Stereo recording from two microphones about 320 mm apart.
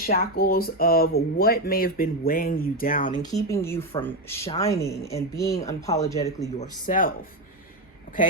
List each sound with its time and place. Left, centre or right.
0.0 s speech: left
3.2 s speech: centre
6.2 s speech: left